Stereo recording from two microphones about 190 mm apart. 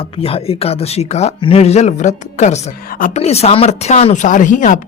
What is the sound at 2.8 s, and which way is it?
Speech, 45° left (ahead or behind).